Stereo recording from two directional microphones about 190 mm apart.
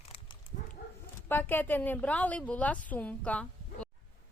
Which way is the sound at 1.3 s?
10° left (ahead or behind).